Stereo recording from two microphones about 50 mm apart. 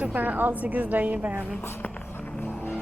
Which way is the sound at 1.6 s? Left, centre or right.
Left.